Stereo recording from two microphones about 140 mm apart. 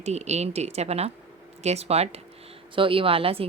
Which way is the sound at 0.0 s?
50° right (ahead or behind).